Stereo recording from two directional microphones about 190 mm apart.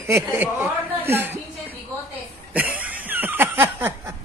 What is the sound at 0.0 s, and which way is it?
Speech, 15° right (ahead or behind).